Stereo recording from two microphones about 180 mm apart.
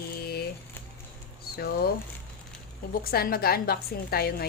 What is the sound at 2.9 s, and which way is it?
Speech, 55° left (ahead or behind).